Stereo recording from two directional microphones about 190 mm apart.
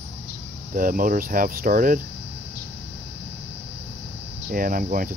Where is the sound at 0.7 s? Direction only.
45° right (ahead or behind).